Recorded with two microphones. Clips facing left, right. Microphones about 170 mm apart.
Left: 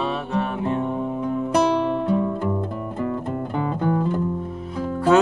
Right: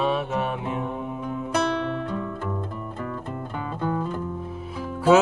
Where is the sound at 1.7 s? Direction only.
15° left (ahead or behind).